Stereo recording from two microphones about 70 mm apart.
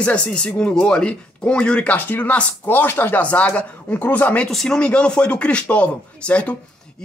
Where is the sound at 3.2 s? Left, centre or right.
Centre.